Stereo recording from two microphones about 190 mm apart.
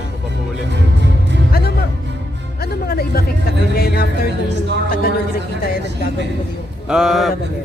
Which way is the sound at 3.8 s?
55° left (ahead or behind).